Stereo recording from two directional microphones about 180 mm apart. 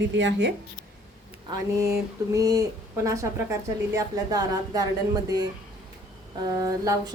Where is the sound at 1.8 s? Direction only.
15° right (ahead or behind).